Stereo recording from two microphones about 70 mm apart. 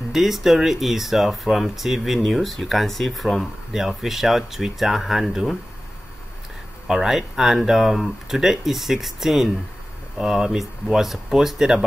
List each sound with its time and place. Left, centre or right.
0.1 s speech: centre
6.9 s speech: centre